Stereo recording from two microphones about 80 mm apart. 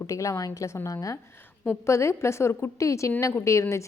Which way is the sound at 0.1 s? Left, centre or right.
Left.